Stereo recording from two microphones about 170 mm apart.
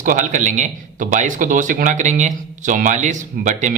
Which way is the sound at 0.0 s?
50° right (ahead or behind).